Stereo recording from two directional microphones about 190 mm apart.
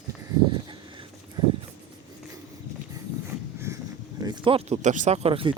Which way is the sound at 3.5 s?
15° right (ahead or behind).